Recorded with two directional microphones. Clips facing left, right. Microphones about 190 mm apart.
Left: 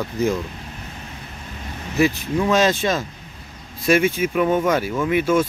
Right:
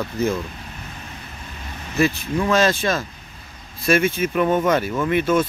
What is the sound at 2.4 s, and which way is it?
Speech, 20° left (ahead or behind).